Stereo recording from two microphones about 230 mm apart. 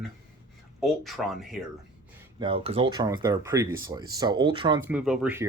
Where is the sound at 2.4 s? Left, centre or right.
Right.